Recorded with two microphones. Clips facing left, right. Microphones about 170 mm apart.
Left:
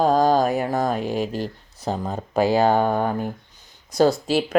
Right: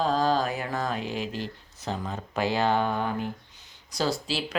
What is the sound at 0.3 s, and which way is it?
Speech, 45° left (ahead or behind).